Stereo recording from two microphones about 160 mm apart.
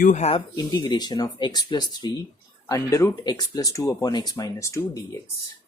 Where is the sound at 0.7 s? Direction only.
25° left (ahead or behind).